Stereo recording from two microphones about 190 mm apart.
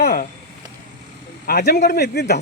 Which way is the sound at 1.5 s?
55° left (ahead or behind).